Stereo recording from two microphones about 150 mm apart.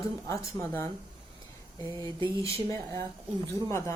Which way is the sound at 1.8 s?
30° right (ahead or behind).